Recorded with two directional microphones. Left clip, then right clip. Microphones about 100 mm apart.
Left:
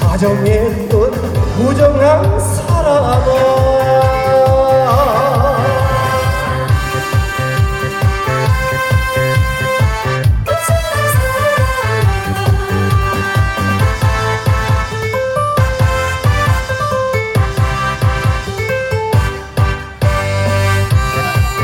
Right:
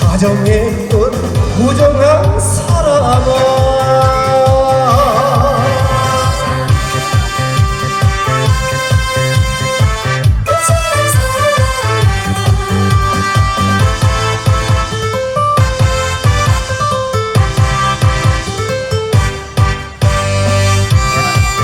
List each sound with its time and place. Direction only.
0.1 s music: 40° right (ahead or behind)
1.8 s a man's voice: 40° right (ahead or behind)
2.7 s music: 45° right (ahead or behind)
10.9 s music: 40° right (ahead or behind)
21.1 s music: 45° right (ahead or behind)